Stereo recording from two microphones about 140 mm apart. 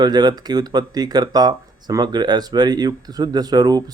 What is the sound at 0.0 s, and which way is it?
Speech, 30° right (ahead or behind).